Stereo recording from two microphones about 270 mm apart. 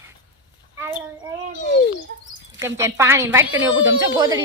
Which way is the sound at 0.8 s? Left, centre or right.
Centre.